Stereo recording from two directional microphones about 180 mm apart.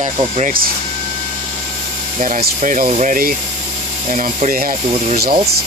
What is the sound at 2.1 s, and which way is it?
Speech, 45° right (ahead or behind).